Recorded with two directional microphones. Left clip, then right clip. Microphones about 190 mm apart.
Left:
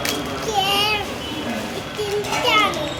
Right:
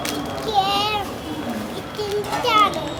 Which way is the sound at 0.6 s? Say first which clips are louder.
Left 3 dB; 20° right (ahead or behind).